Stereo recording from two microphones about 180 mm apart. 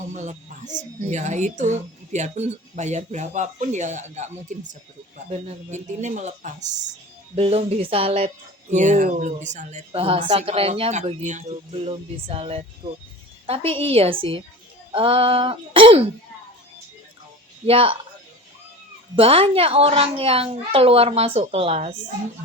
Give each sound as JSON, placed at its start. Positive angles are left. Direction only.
{"t": 0.1, "sound": "a woman's voice", "side_deg": -40}
{"t": 17.7, "sound": "a woman's voice", "side_deg": -30}
{"t": 19.1, "sound": "a woman's voice", "side_deg": -30}